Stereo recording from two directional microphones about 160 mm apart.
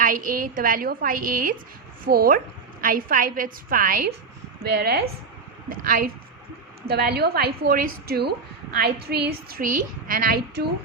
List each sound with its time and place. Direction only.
0.0 s a woman's voice: 60° right (ahead or behind)
4.6 s a woman's voice: 85° right
5.6 s a woman's voice: 60° right (ahead or behind)
6.8 s a woman's voice: 85° right